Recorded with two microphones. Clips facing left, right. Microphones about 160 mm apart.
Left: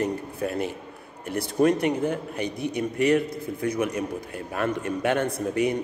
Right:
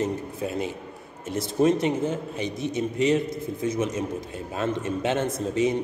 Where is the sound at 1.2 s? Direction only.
60° left (ahead or behind).